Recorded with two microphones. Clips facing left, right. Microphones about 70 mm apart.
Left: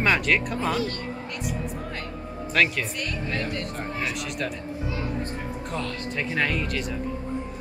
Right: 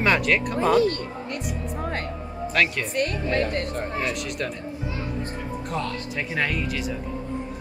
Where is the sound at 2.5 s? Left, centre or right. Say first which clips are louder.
Even; centre.